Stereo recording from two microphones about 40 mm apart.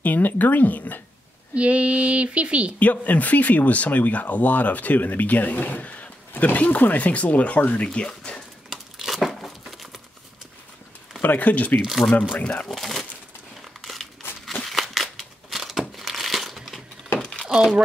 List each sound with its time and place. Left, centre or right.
0.0 s speech: left
1.5 s speech: right
2.8 s speech: left
8.6 s crumpling: centre
11.2 s speech: left
11.8 s speech: centre
12.4 s speech: left
12.6 s speech: centre
13.7 s crushing: centre
14.2 s a sound: left
14.7 s a sound: centre
16.0 s crumpling: centre
17.2 s a sound: left
17.5 s crumpling: centre